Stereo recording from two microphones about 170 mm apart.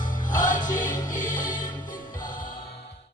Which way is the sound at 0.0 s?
50° left (ahead or behind).